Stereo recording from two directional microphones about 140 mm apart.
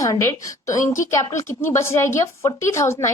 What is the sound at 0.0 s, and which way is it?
A woman's voice, 20° left (ahead or behind).